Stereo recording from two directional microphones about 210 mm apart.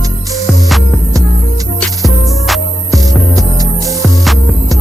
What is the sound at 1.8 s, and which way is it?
Music, centre (ahead or behind).